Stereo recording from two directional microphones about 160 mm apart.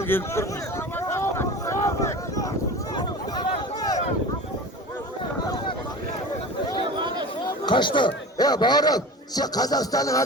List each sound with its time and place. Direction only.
0.0 s speech: 15° left (ahead or behind)
0.9 s a sound: 15° left (ahead or behind)
6.9 s chatter: 30° right (ahead or behind)
7.4 s speech: 30° left (ahead or behind)